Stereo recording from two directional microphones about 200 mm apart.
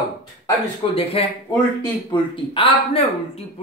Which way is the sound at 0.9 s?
30° left (ahead or behind).